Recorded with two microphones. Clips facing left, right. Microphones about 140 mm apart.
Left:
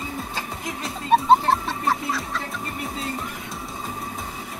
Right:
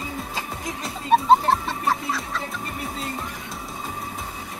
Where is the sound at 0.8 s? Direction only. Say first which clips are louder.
Even; centre (ahead or behind).